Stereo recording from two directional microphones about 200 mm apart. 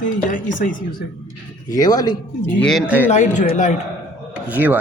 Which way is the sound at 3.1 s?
35° left (ahead or behind).